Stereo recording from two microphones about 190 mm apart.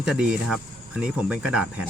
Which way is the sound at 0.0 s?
5° right (ahead or behind).